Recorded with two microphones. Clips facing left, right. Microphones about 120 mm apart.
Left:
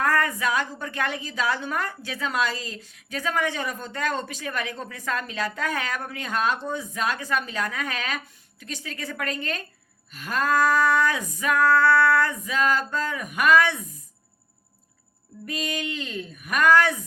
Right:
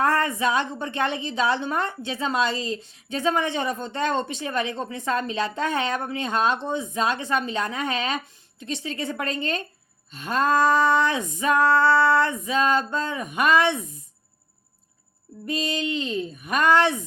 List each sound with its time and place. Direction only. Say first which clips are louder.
0.0 s a woman's voice: right 2 dB; 25° right (ahead or behind)
15.4 s a woman's voice: right 4 dB; 25° right (ahead or behind)